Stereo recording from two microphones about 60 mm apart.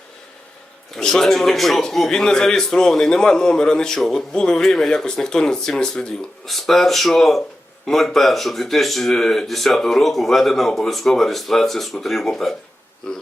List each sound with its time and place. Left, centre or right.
0.9 s a man's voice: centre